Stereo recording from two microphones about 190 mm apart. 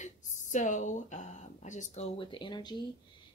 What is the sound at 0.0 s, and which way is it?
Speech, 40° left (ahead or behind).